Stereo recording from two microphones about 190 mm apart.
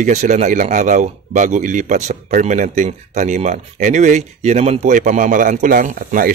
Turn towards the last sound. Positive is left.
turn(degrees=-45)  # may be behind; listen again after turning